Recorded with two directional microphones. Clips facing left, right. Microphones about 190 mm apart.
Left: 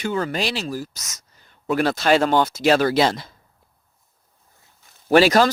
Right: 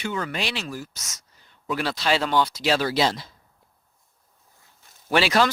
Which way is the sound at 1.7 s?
50° left (ahead or behind).